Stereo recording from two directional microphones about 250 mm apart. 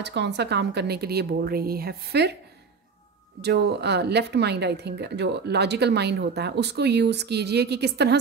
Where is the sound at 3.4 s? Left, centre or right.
Right.